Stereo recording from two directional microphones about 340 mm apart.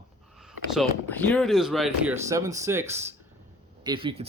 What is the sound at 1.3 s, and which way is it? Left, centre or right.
Speech, centre.